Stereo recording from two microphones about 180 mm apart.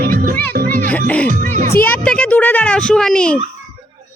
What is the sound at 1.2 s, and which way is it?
Music, 45° right (ahead or behind).